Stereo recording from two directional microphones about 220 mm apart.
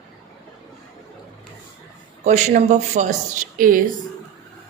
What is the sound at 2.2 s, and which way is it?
A woman's voice, 30° right (ahead or behind).